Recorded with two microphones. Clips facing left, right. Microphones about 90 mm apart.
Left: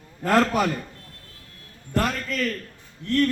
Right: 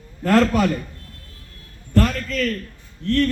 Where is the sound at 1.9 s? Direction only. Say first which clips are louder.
Right 4 dB; 10° left (ahead or behind).